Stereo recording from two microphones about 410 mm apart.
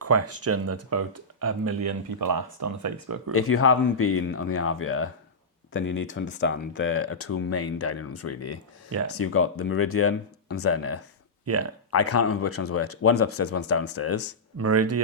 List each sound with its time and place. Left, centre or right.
0.0 s speech: right
3.3 s speech: left
11.4 s speech: right
11.9 s speech: left
14.6 s speech: right